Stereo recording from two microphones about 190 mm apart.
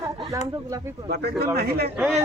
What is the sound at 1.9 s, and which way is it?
Speech, 5° right (ahead or behind).